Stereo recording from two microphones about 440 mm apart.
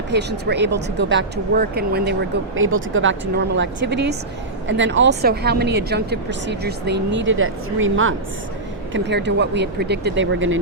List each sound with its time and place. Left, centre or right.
0.1 s speech: right